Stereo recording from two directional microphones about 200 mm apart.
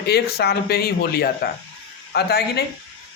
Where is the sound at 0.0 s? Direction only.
55° left (ahead or behind).